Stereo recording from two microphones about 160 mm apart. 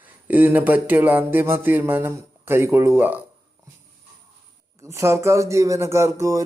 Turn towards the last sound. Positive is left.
turn(degrees=-20)  # may be behind; listen again after turning